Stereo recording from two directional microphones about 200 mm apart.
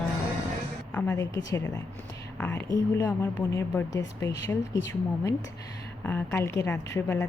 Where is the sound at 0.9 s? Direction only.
10° left (ahead or behind).